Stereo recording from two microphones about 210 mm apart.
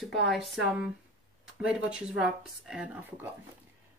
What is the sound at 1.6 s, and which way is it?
Speech, 5° right (ahead or behind).